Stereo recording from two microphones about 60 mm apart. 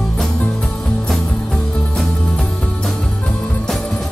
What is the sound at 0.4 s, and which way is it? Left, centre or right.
Music, centre.